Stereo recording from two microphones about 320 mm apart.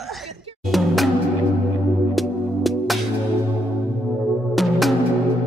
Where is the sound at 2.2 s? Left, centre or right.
Centre.